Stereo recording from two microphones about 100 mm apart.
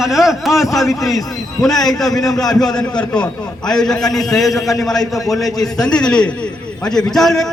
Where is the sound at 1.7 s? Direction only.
40° left (ahead or behind).